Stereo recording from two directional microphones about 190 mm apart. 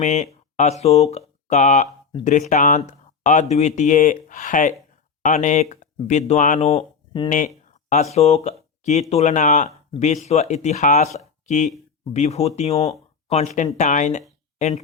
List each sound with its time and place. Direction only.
0.0 s speech: 40° left (ahead or behind)
7.3 s a sound: 40° left (ahead or behind)
8.1 s speech: 35° left (ahead or behind)